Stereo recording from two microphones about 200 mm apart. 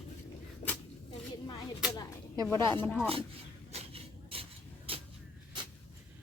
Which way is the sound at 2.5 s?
15° left (ahead or behind).